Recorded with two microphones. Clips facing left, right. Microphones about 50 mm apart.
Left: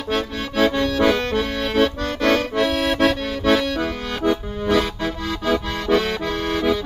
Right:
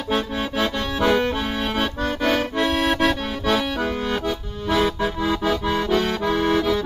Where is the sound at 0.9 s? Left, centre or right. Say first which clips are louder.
Left 1 dB; centre.